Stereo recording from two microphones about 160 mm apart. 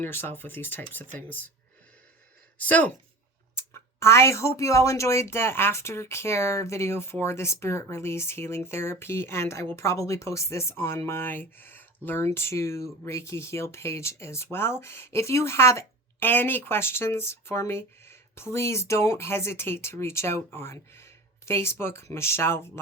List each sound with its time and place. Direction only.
0.0 s speech: 15° left (ahead or behind)
2.6 s speech: 10° left (ahead or behind)